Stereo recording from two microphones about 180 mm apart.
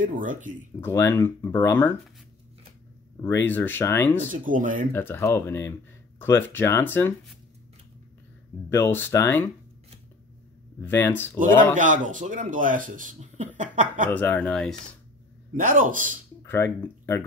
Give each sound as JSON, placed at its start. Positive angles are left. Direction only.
{"t": 0.0, "sound": "speech", "side_deg": -45}
{"t": 0.7, "sound": "speech", "side_deg": 15}
{"t": 3.4, "sound": "speech", "side_deg": 10}
{"t": 4.3, "sound": "speech", "side_deg": -45}
{"t": 4.9, "sound": "speech", "side_deg": 15}
{"t": 8.6, "sound": "speech", "side_deg": 15}
{"t": 10.8, "sound": "speech", "side_deg": 10}
{"t": 11.3, "sound": "speech", "side_deg": -45}
{"t": 14.1, "sound": "speech", "side_deg": 10}
{"t": 15.5, "sound": "speech", "side_deg": -50}
{"t": 16.4, "sound": "speech", "side_deg": 10}